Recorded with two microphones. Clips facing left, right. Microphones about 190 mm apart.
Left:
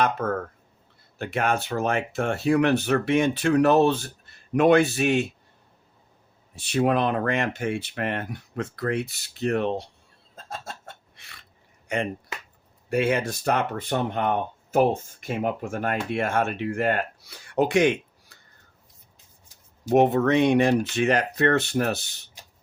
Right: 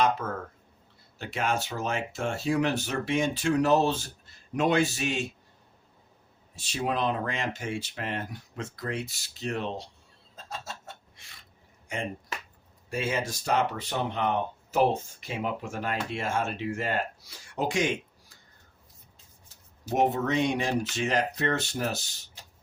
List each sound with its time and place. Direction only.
0.0 s speech: 55° left (ahead or behind)
6.6 s speech: 60° left (ahead or behind)
10.3 s chicken: 55° left (ahead or behind)
11.9 s speech: 65° left (ahead or behind)
19.9 s speech: 60° left (ahead or behind)